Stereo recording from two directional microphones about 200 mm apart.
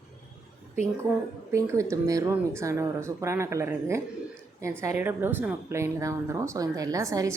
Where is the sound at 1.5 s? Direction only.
15° right (ahead or behind).